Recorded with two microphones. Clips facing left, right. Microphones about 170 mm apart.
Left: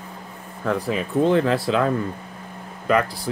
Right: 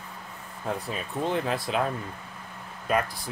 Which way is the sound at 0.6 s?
90° left.